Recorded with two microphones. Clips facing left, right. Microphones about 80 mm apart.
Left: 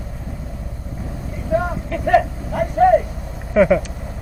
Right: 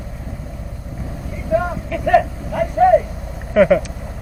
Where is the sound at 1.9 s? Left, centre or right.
Left.